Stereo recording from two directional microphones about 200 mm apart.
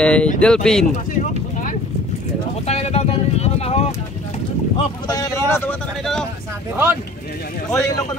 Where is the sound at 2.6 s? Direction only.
30° left (ahead or behind).